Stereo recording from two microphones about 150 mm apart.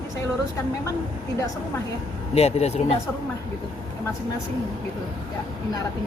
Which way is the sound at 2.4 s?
45° left (ahead or behind).